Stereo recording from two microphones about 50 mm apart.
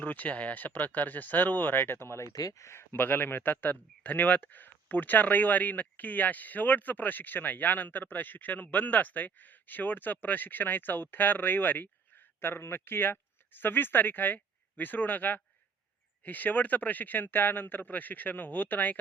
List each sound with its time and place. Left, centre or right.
0.0 s speech: left
2.9 s speech: left